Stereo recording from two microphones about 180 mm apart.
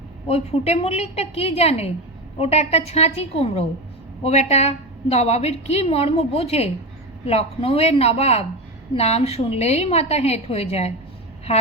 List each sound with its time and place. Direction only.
0.3 s a woman's voice: 35° left (ahead or behind)